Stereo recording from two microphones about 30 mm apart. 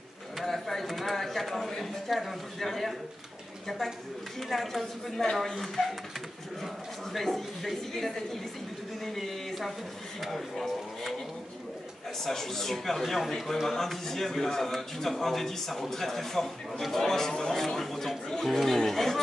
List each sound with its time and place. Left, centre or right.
0.5 s a sound: centre
2.0 s a woman's voice: centre
4.4 s a woman's voice: centre
12.2 s a man's voice: centre
17.3 s speech: left
17.6 s a man's voice: centre